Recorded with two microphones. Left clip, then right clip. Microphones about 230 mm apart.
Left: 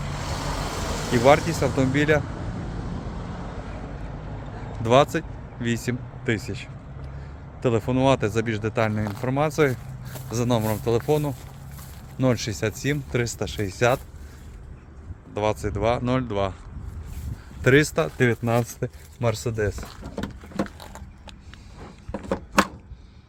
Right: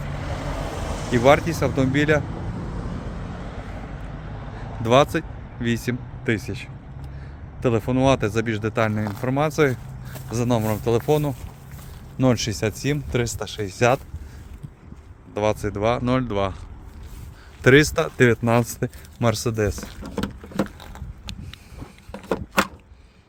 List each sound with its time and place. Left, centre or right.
0.0 s vehicle: left
1.1 s speech: centre
4.8 s speech: centre
15.3 s speech: centre
17.6 s speech: centre
22.1 s a sound: right